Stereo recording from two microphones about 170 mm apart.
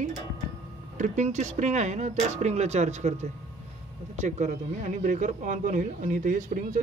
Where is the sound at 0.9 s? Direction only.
45° right (ahead or behind).